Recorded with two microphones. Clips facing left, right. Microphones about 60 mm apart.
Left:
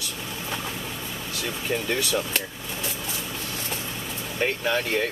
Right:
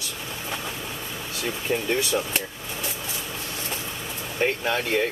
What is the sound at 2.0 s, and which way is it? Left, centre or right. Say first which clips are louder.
Speech: right 1 dB; right.